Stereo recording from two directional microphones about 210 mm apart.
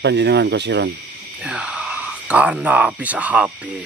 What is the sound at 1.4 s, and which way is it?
Speech, 5° right (ahead or behind).